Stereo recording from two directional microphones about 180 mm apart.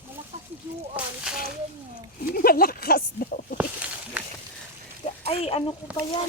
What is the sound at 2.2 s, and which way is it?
Speech, 55° left (ahead or behind).